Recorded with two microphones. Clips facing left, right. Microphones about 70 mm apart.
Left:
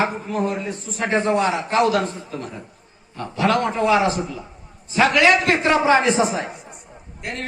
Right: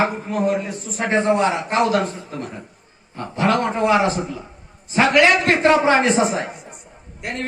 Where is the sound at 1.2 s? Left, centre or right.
Right.